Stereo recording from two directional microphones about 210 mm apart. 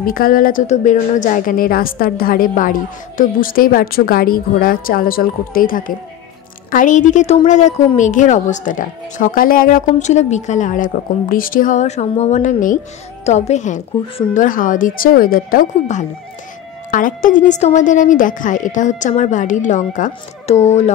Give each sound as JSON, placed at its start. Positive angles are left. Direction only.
{"t": 0.0, "sound": "a woman's voice", "side_deg": 45}